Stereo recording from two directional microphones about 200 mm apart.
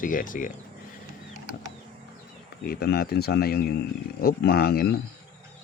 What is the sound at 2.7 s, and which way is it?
Speech, 50° left (ahead or behind).